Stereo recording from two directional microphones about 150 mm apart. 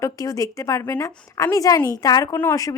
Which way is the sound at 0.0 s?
20° left (ahead or behind).